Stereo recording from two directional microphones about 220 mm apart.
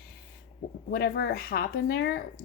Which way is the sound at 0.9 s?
45° left (ahead or behind).